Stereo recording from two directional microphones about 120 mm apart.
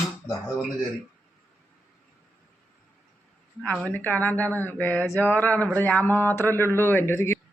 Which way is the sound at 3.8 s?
15° left (ahead or behind).